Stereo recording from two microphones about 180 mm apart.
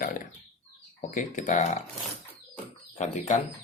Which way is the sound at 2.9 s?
40° left (ahead or behind).